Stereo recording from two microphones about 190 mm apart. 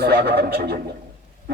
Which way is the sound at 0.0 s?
55° right (ahead or behind).